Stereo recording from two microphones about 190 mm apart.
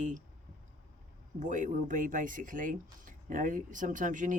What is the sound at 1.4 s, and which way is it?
Speech, 40° right (ahead or behind).